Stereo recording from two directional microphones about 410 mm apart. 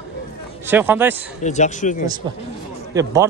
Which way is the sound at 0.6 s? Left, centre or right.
Centre.